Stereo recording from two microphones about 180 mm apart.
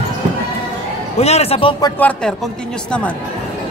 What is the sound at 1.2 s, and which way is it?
Speech, 35° left (ahead or behind).